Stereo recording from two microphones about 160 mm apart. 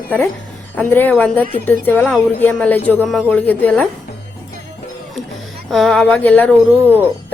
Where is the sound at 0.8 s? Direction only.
10° left (ahead or behind).